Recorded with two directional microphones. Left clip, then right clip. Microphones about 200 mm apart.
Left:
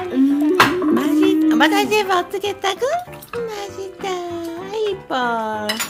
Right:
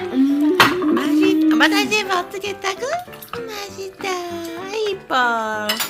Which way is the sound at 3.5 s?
20° left (ahead or behind).